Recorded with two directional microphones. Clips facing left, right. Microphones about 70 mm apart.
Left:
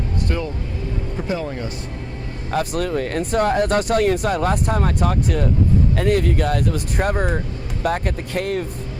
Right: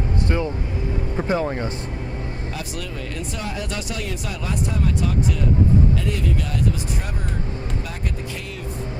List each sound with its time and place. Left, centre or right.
0.3 s speech: right
2.5 s speech: left